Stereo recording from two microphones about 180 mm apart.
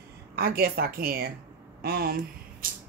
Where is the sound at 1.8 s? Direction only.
60° right (ahead or behind).